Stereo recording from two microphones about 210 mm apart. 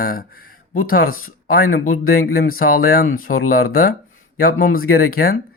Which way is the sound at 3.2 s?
80° left.